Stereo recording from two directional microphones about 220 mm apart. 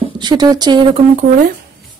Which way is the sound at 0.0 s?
20° right (ahead or behind).